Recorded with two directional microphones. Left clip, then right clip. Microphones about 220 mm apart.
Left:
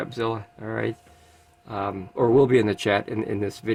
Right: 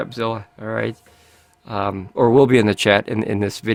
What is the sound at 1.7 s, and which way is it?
Speech, 50° right (ahead or behind).